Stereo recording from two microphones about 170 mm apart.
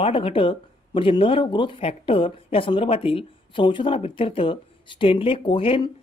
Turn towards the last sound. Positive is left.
turn(degrees=30)  # may be behind; listen again after turning